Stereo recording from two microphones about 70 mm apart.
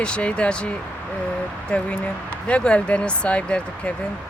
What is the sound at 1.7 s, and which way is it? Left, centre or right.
Speech, centre.